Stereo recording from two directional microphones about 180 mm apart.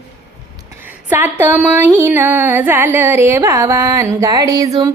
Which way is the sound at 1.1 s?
10° right (ahead or behind).